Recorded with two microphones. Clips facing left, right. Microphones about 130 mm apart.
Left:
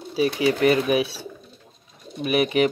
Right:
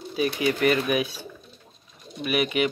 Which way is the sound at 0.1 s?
30° left (ahead or behind).